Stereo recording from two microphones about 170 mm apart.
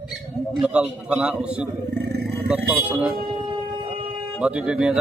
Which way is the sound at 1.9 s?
70° right (ahead or behind).